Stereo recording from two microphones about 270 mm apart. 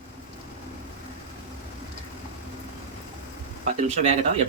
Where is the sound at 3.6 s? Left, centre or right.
Right.